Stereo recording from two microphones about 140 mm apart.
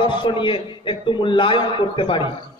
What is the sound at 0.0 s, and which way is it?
A man's voice, 35° left (ahead or behind).